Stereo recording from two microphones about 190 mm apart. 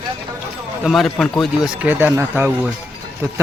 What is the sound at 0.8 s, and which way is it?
A man's voice, centre (ahead or behind).